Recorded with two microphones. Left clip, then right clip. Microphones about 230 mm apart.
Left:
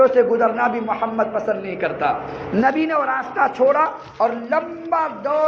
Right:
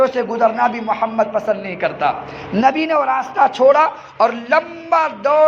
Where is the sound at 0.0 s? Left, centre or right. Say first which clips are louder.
Left 1 dB; right.